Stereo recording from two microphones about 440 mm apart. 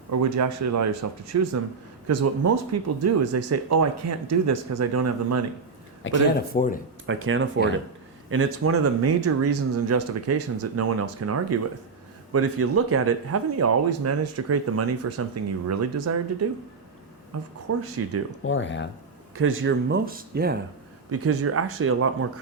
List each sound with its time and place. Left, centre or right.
0.1 s speech: right
6.0 s speech: left
7.1 s speech: right
18.4 s speech: left
19.4 s speech: right
21.1 s speech: right